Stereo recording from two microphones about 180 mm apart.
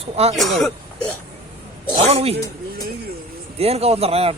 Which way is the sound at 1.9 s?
35° right (ahead or behind).